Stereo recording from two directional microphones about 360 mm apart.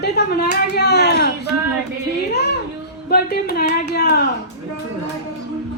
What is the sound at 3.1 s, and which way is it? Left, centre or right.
A woman's voice, left.